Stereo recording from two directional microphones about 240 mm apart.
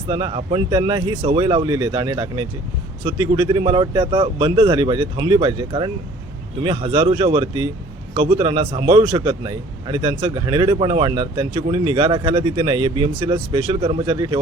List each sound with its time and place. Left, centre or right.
0.1 s a man's voice: centre